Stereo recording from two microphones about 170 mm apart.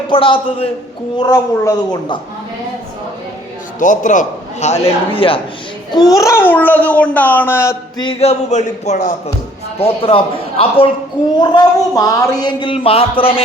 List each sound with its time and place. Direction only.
0.1 s a man's voice: 30° left (ahead or behind)
3.8 s a man's voice: 50° left (ahead or behind); by 5.4 s 30° left (ahead or behind)
5.9 s a child's voice: 20° left (ahead or behind)
8.0 s a man's voice: 40° left (ahead or behind)